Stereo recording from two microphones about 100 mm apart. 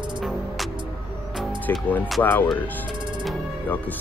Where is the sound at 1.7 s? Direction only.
25° left (ahead or behind).